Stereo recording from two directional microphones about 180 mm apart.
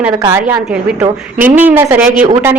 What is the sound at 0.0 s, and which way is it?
Speech, 15° right (ahead or behind).